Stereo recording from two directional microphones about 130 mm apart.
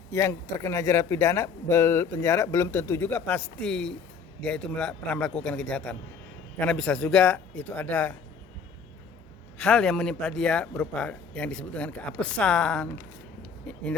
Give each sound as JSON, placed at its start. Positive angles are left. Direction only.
{"t": 0.1, "sound": "speech", "side_deg": 20}
{"t": 9.6, "sound": "speech", "side_deg": 10}